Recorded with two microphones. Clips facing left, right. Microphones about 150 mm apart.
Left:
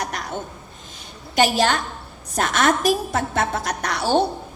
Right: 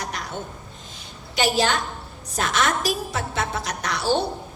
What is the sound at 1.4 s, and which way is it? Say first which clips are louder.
A woman's voice: left 3 dB; 50° left (ahead or behind).